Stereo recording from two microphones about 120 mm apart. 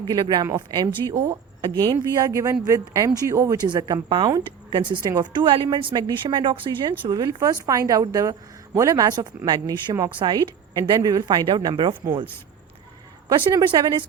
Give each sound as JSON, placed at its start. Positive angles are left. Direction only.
{"t": 0.0, "sound": "a woman's voice", "side_deg": -35}
{"t": 3.6, "sound": "a woman's voice", "side_deg": -35}
{"t": 13.2, "sound": "a woman's voice", "side_deg": -30}